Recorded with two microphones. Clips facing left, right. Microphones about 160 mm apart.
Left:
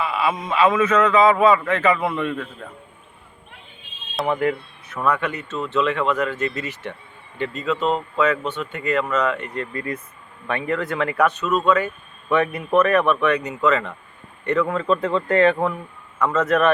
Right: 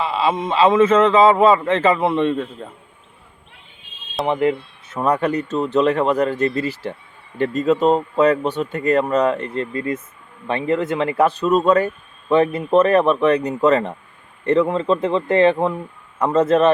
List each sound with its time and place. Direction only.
0.0 s a man's voice: 25° right (ahead or behind)
4.3 s speech: 20° right (ahead or behind)
7.3 s a man's voice: 45° right (ahead or behind); by 15.8 s 20° right (ahead or behind)
16.1 s a man's voice: 30° right (ahead or behind)